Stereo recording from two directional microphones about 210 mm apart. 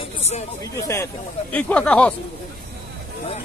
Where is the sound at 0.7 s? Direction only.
15° left (ahead or behind).